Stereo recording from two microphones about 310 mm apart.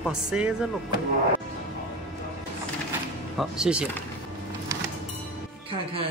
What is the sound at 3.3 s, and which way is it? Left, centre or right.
Speech, centre.